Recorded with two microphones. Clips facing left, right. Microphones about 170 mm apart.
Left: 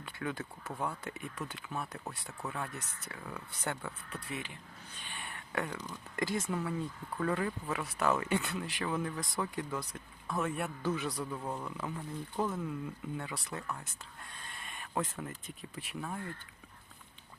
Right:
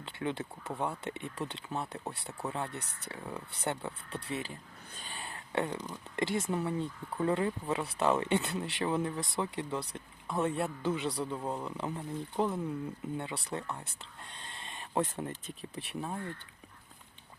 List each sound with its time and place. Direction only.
0.0 s speech: 25° right (ahead or behind)
4.2 s speech: 30° right (ahead or behind)
4.9 s a sound: 35° right (ahead or behind)
5.8 s speech: 25° right (ahead or behind)